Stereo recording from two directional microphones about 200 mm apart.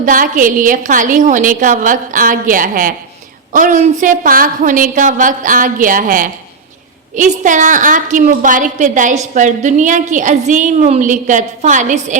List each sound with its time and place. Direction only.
0.0 s a woman's voice: 40° right (ahead or behind)